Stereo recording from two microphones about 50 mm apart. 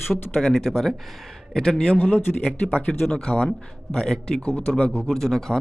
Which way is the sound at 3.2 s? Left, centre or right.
Centre.